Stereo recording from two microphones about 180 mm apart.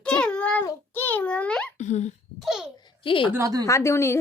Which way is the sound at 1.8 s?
40° left (ahead or behind).